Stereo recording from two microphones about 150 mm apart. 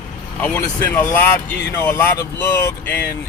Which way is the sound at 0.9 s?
15° left (ahead or behind).